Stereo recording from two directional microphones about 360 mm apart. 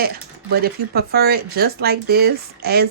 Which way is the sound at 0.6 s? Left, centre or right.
Right.